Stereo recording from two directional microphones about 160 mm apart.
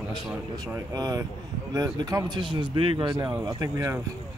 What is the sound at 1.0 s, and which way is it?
Speech, 25° right (ahead or behind).